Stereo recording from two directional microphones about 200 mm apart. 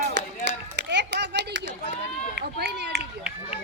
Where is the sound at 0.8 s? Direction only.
60° right (ahead or behind).